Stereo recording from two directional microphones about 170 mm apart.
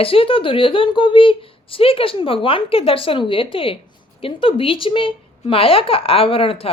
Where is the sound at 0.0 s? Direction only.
35° left (ahead or behind).